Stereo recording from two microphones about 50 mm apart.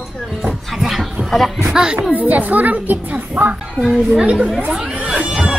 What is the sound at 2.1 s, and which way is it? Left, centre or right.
A woman's voice, right.